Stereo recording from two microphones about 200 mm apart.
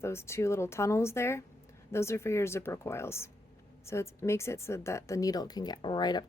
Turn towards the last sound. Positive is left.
turn(degrees=20)  # may be behind; listen again after turning